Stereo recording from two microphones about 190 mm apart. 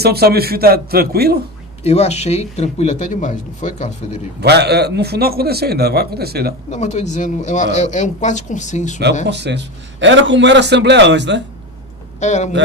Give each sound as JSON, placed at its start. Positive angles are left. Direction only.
{"t": 0.0, "sound": "a man's voice", "side_deg": -55}
{"t": 1.8, "sound": "speech", "side_deg": 35}
{"t": 4.4, "sound": "a man's voice", "side_deg": -60}
{"t": 6.7, "sound": "speech", "side_deg": 35}
{"t": 9.3, "sound": "a man's voice", "side_deg": -65}
{"t": 12.2, "sound": "speech", "side_deg": 40}